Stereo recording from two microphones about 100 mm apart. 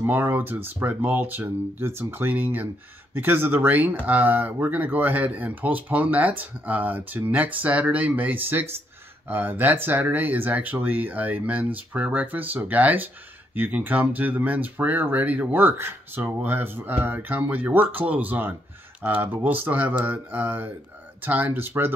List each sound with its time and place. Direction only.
0.0 s speech: 20° right (ahead or behind)